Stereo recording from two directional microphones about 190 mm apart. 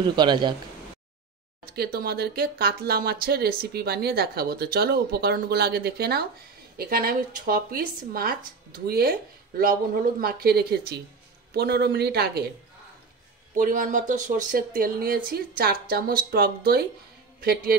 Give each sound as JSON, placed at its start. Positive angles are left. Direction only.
{"t": 0.0, "sound": "speech", "side_deg": -25}
{"t": 1.8, "sound": "speech", "side_deg": -55}
{"t": 10.2, "sound": "speech", "side_deg": -55}
{"t": 13.6, "sound": "a man's voice", "side_deg": -45}